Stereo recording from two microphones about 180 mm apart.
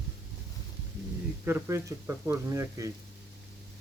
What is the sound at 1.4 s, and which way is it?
Speech, 15° right (ahead or behind).